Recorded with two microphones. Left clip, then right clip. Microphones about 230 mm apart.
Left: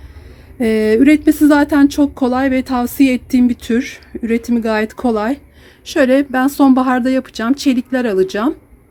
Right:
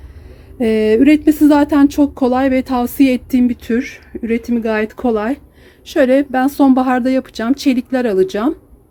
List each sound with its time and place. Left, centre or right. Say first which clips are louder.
0.6 s speech: even; centre